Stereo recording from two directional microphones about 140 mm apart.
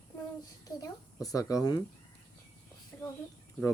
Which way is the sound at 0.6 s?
25° left (ahead or behind).